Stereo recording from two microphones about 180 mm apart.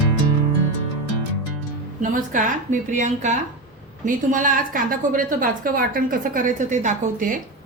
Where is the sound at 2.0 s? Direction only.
45° right (ahead or behind).